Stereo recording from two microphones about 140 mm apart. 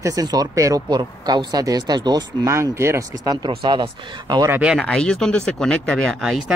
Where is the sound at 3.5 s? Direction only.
40° right (ahead or behind).